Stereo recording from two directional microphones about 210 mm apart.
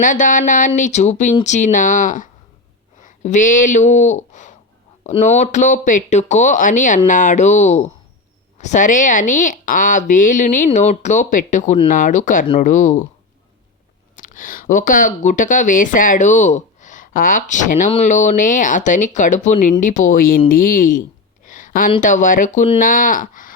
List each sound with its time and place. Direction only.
0.0 s speech: 40° left (ahead or behind)
14.2 s speech: 40° left (ahead or behind)
21.4 s a sound: 40° left (ahead or behind)
22.0 s speech: 40° left (ahead or behind)